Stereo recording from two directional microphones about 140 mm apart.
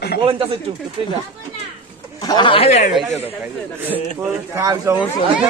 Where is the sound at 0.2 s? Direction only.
40° right (ahead or behind).